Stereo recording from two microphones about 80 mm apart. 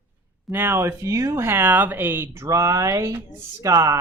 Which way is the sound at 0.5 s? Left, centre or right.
Right.